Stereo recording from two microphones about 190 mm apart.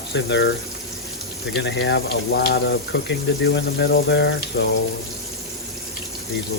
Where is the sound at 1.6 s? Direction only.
65° left (ahead or behind).